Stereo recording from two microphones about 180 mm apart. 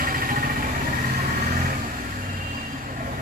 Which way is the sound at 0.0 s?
55° right (ahead or behind).